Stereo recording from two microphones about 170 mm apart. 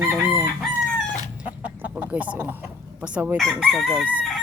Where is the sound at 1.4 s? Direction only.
10° right (ahead or behind).